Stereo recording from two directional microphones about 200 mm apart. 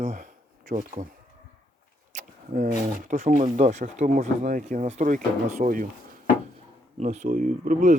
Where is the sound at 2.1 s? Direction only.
40° right (ahead or behind).